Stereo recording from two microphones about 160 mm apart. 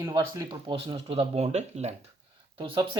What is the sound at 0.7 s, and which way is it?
Speech, 35° right (ahead or behind).